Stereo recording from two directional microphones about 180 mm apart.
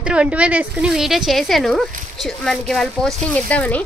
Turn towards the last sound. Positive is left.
turn(degrees=10)  # may be behind; listen again after turning